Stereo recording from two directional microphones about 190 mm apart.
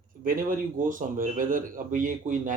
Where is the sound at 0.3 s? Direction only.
45° right (ahead or behind).